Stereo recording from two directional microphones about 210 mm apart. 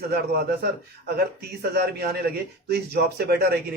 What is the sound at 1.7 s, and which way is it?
A man's voice, 50° right (ahead or behind).